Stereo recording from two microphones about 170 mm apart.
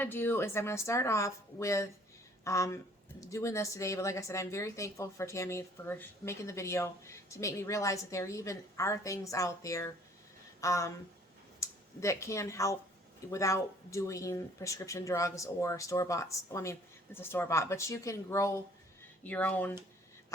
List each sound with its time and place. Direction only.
0.0 s speech: 10° left (ahead or behind)
10.6 s a sound: 20° left (ahead or behind)
11.6 s speech: 15° left (ahead or behind)